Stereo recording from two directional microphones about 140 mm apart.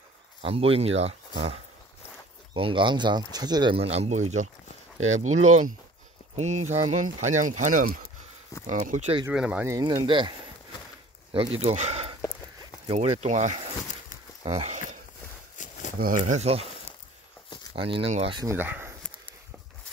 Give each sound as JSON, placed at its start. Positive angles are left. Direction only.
{"t": 0.4, "sound": "speech", "side_deg": -45}
{"t": 3.7, "sound": "speech", "side_deg": -45}
{"t": 8.6, "sound": "speech", "side_deg": -60}
{"t": 9.3, "sound": "speech", "side_deg": -5}
{"t": 9.7, "sound": "speech", "side_deg": -25}
{"t": 14.4, "sound": "speech", "side_deg": -45}
{"t": 15.5, "sound": "a sound", "side_deg": 65}
{"t": 16.0, "sound": "speech", "side_deg": -75}
{"t": 16.3, "sound": "speech", "side_deg": -45}
{"t": 17.7, "sound": "speech", "side_deg": -40}
{"t": 18.5, "sound": "a sound", "side_deg": -15}